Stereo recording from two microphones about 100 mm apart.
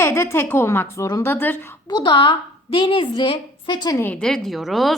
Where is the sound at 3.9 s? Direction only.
20° left (ahead or behind).